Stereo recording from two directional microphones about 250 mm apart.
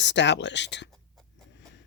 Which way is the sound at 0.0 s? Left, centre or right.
Left.